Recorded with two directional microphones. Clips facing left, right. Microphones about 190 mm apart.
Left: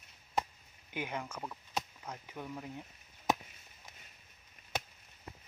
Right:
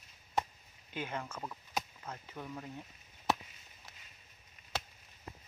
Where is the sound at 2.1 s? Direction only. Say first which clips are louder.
Left 1 dB; 10° left (ahead or behind).